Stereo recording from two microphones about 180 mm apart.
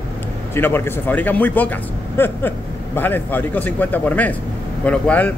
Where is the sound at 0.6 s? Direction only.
10° left (ahead or behind).